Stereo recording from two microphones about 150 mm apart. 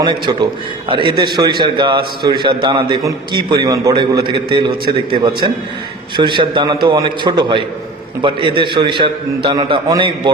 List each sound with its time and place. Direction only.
0.0 s a man's voice: 30° right (ahead or behind)